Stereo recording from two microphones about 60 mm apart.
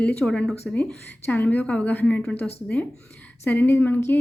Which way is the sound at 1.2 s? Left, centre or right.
Left.